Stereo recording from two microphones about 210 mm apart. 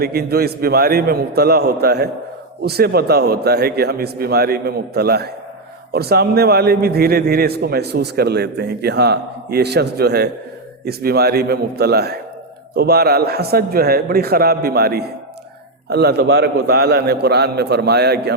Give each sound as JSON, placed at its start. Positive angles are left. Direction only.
{"t": 0.0, "sound": "a man's voice", "side_deg": -50}